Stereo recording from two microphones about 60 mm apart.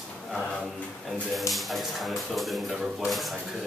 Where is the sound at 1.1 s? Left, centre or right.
Centre.